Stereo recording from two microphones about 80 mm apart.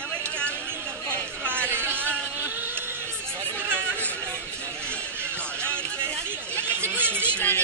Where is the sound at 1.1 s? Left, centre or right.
Right.